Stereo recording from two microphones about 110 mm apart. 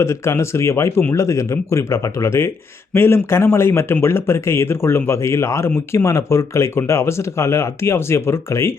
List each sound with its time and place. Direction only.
0.0 s speech: 25° left (ahead or behind)